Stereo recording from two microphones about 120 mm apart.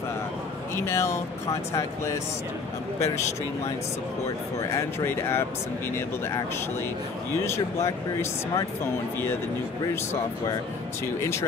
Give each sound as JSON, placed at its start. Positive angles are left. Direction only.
{"t": 0.7, "sound": "speech", "side_deg": 25}
{"t": 4.7, "sound": "speech", "side_deg": 20}
{"t": 7.3, "sound": "speech", "side_deg": 20}